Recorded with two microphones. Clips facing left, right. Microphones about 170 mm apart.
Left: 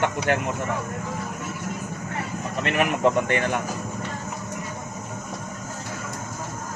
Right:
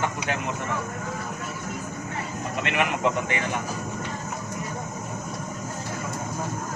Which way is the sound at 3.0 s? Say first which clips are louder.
Left 5 dB; 55° left (ahead or behind).